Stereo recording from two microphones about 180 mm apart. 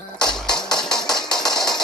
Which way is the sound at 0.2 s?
5° left (ahead or behind).